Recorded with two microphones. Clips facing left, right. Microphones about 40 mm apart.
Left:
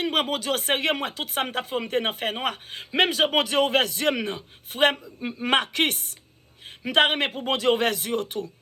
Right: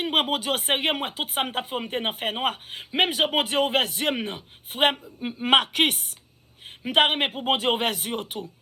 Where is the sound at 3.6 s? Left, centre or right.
Right.